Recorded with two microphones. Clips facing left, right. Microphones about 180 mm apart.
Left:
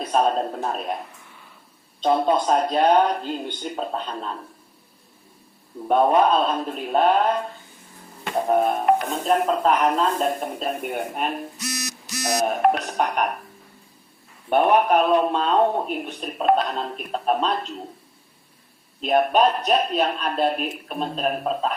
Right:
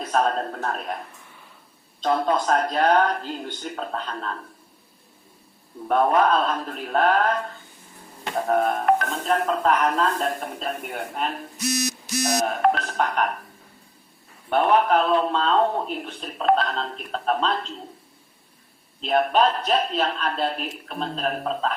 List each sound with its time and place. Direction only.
0.0 s speech: 10° left (ahead or behind)
2.0 s speech: 15° left (ahead or behind)
5.9 s speech: 15° left (ahead or behind)
12.5 s speech: 15° left (ahead or behind)
14.5 s speech: 15° left (ahead or behind)
18.9 s speech: 15° left (ahead or behind)